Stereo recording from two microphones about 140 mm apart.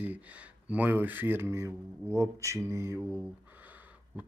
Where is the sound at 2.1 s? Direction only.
20° right (ahead or behind).